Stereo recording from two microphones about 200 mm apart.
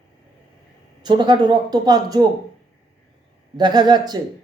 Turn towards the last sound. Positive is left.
turn(degrees=-20)  # may be behind; listen again after turning